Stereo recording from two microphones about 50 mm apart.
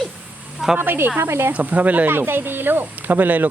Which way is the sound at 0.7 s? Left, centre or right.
Right.